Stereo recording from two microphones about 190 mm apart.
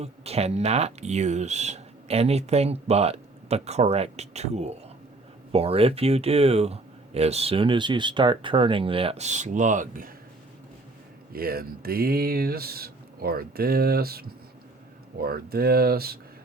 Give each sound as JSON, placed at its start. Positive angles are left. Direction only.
{"t": 0.0, "sound": "speech", "side_deg": -35}
{"t": 11.3, "sound": "speech", "side_deg": -50}